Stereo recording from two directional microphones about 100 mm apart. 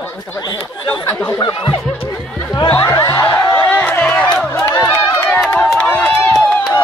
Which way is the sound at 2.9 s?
30° left (ahead or behind).